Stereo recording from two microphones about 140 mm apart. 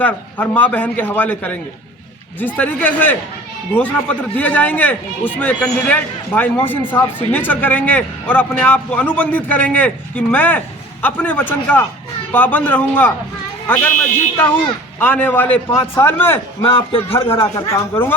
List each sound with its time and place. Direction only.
0.0 s a man's voice: 10° left (ahead or behind)
2.6 s a man's voice: 10° left (ahead or behind)
16.6 s a man's voice: 40° left (ahead or behind)
17.5 s speech: 25° left (ahead or behind)